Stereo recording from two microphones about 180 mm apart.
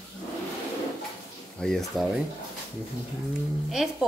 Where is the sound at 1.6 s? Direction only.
Centre (ahead or behind).